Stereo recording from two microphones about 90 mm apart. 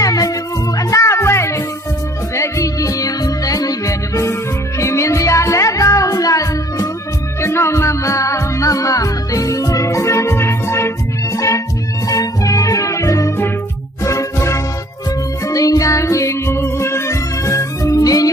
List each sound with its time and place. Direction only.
0.0 s music: 40° left (ahead or behind)